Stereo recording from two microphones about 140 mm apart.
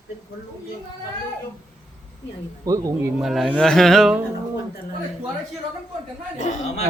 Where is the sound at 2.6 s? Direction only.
25° right (ahead or behind).